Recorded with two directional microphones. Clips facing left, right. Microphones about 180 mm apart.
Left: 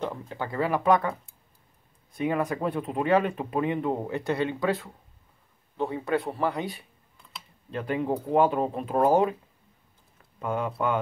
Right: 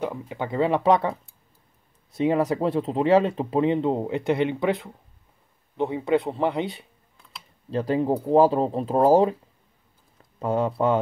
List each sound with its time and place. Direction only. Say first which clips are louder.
0.0 s speech: right 3 dB; 10° right (ahead or behind); by 1.1 s 30° right (ahead or behind)
2.1 s speech: right 5 dB; 30° right (ahead or behind)
10.4 s speech: right 5 dB; 30° right (ahead or behind)